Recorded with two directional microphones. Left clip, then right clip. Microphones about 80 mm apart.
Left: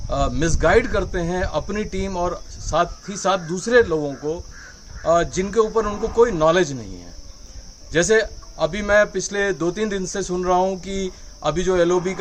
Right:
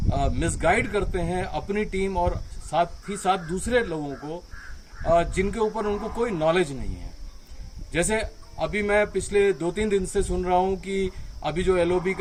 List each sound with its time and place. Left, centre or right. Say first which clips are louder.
0.1 s a man's voice: left 5 dB; left
7.9 s a man's voice: left 8 dB; left